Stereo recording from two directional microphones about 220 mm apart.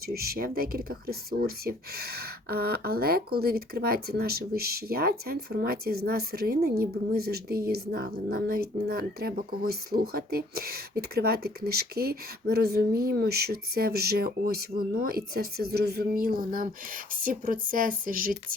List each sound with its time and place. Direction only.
0.1 s speech: 45° right (ahead or behind)